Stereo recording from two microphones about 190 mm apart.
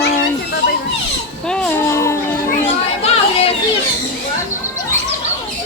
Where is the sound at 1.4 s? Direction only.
5° left (ahead or behind).